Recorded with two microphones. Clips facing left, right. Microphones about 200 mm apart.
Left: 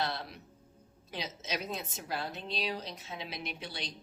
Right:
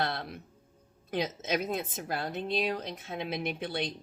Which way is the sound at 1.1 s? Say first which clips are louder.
Right 8 dB; 55° right (ahead or behind).